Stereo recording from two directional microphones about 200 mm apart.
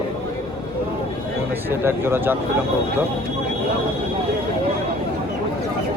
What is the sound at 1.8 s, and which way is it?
Speech, 10° right (ahead or behind).